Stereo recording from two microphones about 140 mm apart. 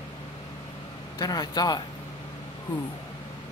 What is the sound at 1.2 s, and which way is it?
Speech, 30° left (ahead or behind).